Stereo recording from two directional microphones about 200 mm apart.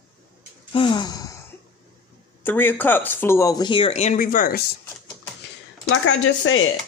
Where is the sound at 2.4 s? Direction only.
10° left (ahead or behind); by 4.6 s 45° left (ahead or behind).